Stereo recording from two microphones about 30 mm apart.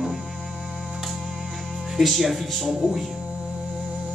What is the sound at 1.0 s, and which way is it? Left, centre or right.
Music, centre.